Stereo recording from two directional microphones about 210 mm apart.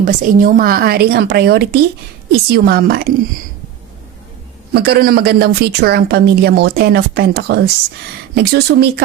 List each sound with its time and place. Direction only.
0.0 s a woman's voice: 40° right (ahead or behind)
4.7 s a woman's voice: 50° right (ahead or behind)